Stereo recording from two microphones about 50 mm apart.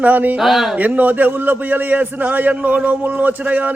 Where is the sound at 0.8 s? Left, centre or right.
Right.